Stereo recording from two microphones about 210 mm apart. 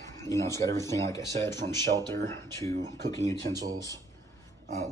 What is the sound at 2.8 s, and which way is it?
Speech, 15° left (ahead or behind).